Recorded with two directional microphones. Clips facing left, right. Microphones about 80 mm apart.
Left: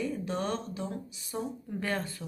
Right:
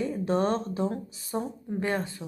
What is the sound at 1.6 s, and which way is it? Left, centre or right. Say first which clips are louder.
Speech: right 4 dB; right.